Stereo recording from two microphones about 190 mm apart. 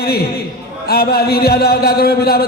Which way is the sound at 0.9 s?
55° left (ahead or behind).